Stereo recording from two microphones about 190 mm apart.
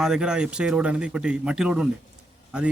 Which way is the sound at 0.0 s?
5° right (ahead or behind).